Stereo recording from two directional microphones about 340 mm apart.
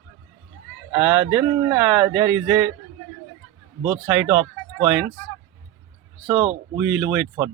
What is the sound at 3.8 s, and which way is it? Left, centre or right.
Speech, centre.